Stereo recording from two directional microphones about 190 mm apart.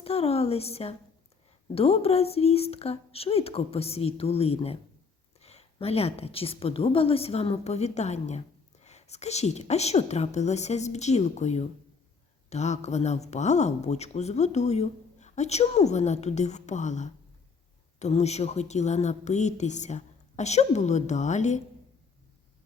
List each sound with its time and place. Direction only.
0.0 s speech: 30° left (ahead or behind)